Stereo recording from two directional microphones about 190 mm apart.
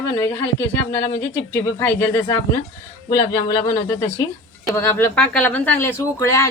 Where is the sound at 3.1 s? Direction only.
20° left (ahead or behind).